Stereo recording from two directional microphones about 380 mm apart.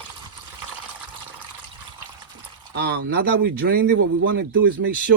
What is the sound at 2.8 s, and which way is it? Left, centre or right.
Speech, right.